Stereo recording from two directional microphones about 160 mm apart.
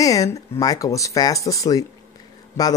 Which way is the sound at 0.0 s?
20° left (ahead or behind).